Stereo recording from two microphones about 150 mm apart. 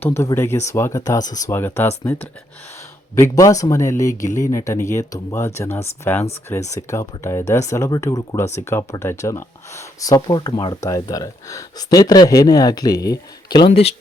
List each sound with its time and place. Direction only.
0.0 s speech: 20° left (ahead or behind)
3.2 s speech: 20° left (ahead or behind)